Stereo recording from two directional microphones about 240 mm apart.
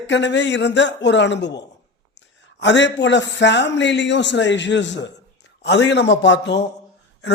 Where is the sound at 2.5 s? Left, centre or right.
Left.